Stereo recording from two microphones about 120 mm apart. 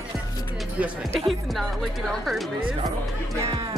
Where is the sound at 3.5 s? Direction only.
40° right (ahead or behind).